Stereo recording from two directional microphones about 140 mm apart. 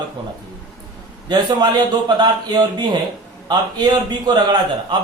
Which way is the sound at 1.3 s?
30° right (ahead or behind).